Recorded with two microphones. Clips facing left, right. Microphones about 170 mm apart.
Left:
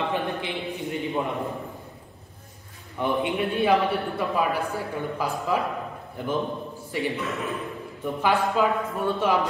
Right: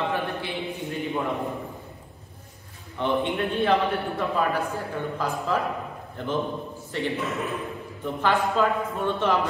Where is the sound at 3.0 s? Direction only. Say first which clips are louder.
Even; 10° left (ahead or behind).